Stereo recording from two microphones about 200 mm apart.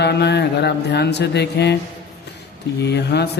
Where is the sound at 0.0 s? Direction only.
55° left (ahead or behind).